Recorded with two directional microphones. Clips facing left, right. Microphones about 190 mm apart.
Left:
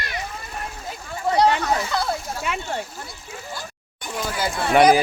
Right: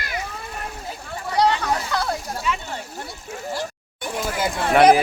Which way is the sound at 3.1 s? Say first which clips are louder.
Right 5 dB; 85° right.